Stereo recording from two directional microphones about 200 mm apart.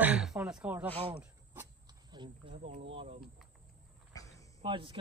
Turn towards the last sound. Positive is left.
turn(degrees=-25)  # may be behind; listen again after turning